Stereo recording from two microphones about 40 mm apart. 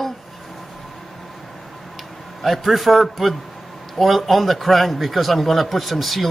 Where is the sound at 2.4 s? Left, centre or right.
Centre.